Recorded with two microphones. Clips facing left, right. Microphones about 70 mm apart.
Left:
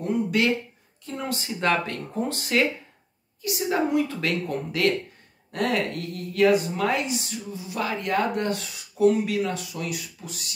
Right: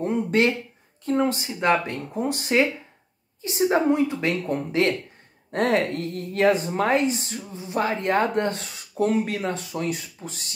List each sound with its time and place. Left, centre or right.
0.0 s a sound: right
1.0 s speech: right
1.3 s speech: centre
3.4 s speech: right
4.1 s speech: right